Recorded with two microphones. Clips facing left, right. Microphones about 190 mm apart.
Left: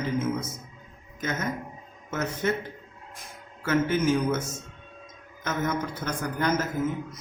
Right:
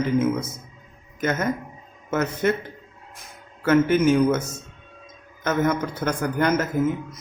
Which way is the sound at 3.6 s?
60° right (ahead or behind).